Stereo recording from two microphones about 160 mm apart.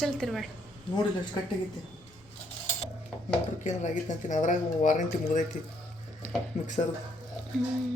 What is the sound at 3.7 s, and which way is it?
Speech, 50° left (ahead or behind).